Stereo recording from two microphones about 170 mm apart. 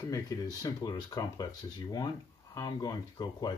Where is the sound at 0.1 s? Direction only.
20° left (ahead or behind).